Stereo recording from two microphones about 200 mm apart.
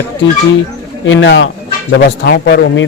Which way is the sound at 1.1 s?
65° left (ahead or behind).